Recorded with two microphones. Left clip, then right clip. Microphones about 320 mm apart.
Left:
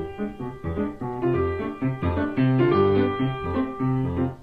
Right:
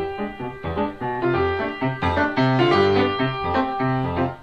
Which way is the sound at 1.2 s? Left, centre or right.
Right.